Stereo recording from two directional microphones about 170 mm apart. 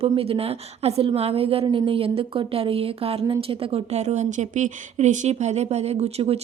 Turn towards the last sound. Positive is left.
turn(degrees=-35)  # may be behind; listen again after turning